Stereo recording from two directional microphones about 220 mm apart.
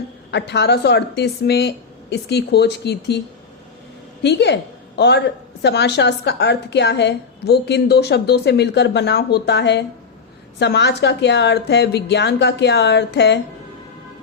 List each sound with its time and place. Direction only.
0.3 s a woman's voice: 50° left (ahead or behind)
4.2 s a woman's voice: 50° left (ahead or behind)